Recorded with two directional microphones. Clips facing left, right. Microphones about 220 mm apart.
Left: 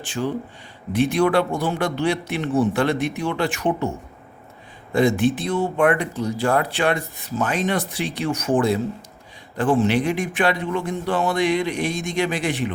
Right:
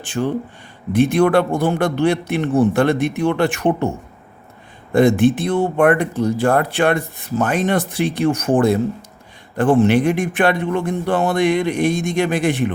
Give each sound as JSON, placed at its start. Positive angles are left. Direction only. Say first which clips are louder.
{"t": 0.0, "sound": "speech", "louder": "right 4 dB", "side_deg": -55}
{"t": 4.9, "sound": "speech", "louder": "right 5 dB", "side_deg": -55}